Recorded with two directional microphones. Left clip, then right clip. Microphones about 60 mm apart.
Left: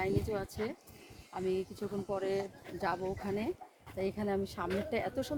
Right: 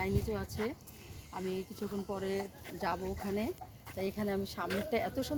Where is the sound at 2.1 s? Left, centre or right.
Left.